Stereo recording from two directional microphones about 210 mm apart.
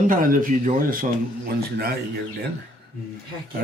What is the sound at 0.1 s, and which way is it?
A man's voice, 40° right (ahead or behind).